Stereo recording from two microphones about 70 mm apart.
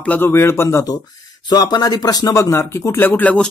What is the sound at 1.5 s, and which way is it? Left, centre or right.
Speech, left.